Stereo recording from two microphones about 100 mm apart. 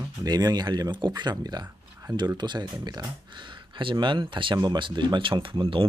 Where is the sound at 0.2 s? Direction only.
40° right (ahead or behind).